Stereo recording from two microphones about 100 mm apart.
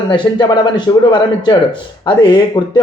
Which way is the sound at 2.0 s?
50° left (ahead or behind).